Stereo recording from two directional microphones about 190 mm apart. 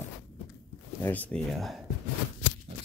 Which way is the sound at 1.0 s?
10° left (ahead or behind).